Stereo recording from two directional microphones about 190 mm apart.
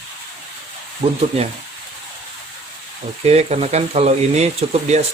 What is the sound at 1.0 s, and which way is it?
Speech, 35° right (ahead or behind).